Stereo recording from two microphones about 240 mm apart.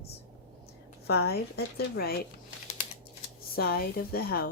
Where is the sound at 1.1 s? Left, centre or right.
Left.